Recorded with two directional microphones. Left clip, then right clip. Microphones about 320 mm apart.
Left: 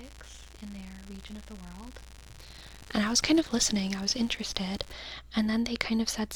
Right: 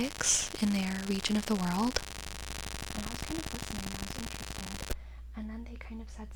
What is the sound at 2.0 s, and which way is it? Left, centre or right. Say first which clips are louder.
Static: right 9 dB; centre.